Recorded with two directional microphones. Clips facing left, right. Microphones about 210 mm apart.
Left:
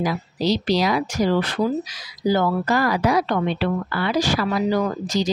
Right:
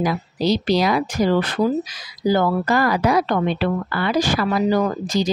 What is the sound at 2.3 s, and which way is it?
Speech, 50° right (ahead or behind).